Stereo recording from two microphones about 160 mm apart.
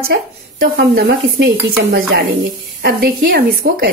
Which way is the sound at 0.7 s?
90° right.